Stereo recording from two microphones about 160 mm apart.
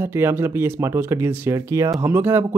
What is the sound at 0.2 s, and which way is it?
Speech, 15° right (ahead or behind).